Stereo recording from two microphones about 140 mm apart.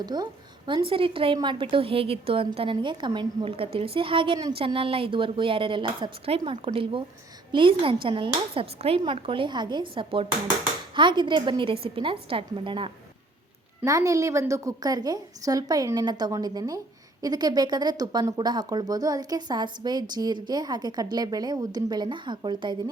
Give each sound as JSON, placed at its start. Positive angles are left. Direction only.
{"t": 0.0, "sound": "a woman's voice", "side_deg": -30}
{"t": 13.8, "sound": "speech", "side_deg": -25}